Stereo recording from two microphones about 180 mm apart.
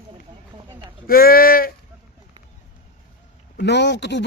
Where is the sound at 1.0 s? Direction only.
55° left (ahead or behind).